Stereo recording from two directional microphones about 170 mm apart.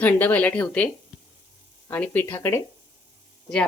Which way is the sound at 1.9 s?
10° left (ahead or behind).